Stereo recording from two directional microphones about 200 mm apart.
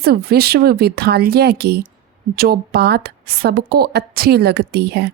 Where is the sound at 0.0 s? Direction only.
50° right (ahead or behind).